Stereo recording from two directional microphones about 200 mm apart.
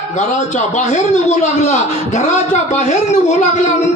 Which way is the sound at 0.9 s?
35° left (ahead or behind).